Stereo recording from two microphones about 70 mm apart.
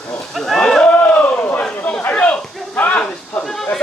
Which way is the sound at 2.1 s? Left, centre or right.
Centre.